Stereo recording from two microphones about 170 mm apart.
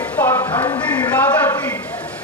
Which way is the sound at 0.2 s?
15° left (ahead or behind).